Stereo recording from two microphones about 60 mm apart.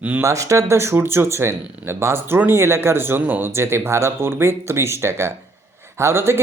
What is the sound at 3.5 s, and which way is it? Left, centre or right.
Speech, right.